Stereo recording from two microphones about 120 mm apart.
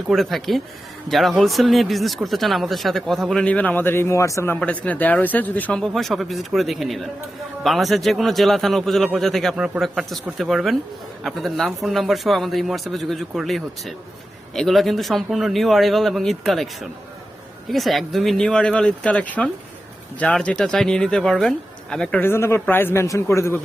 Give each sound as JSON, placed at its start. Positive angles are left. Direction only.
{"t": 0.1, "sound": "speech", "side_deg": 0}
{"t": 4.6, "sound": "speech", "side_deg": 10}
{"t": 5.8, "sound": "speech", "side_deg": 0}
{"t": 17.7, "sound": "a man's voice", "side_deg": 0}